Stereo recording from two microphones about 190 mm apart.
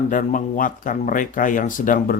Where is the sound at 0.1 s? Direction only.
45° left (ahead or behind).